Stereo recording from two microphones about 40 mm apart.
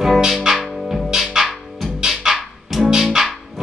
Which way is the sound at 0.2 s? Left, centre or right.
Centre.